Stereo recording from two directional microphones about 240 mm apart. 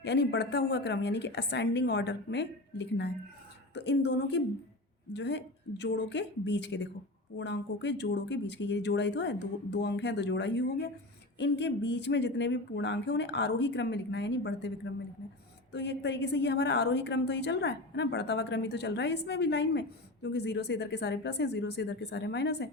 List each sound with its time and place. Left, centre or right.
0.0 s a woman's voice: left
15.7 s a woman's voice: left